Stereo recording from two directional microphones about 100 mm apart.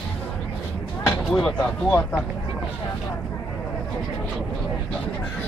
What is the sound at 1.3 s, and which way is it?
Speech, 10° left (ahead or behind).